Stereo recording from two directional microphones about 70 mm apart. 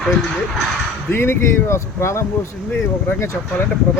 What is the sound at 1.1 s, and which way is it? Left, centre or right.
Speech, left.